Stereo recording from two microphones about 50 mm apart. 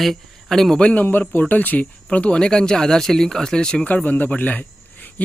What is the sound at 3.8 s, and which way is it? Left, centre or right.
Speech, left.